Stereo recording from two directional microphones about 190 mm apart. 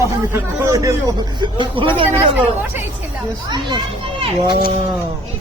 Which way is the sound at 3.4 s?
25° right (ahead or behind).